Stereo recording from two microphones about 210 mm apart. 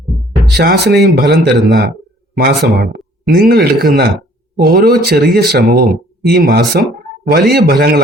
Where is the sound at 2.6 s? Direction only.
50° right (ahead or behind).